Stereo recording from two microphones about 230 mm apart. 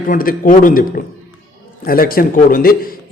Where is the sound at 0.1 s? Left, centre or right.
Left.